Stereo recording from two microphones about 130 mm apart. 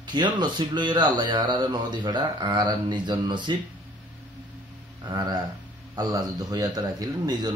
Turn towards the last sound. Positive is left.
turn(degrees=-30)  # may be behind; listen again after turning